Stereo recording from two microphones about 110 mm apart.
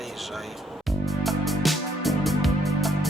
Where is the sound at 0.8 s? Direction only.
Centre (ahead or behind).